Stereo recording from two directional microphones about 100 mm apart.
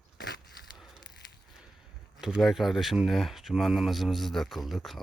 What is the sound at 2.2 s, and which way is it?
Speech, 5° right (ahead or behind).